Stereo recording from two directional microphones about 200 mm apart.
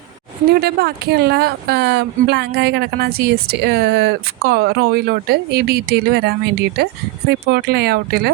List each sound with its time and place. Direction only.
0.5 s speech: 50° right (ahead or behind)